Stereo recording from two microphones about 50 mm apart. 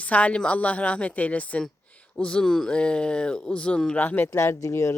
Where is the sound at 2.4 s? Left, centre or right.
Centre.